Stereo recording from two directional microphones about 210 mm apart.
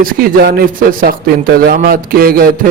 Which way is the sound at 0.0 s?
45° right (ahead or behind).